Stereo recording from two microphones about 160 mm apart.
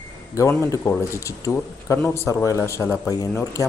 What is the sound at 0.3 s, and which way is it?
Speech, 20° left (ahead or behind).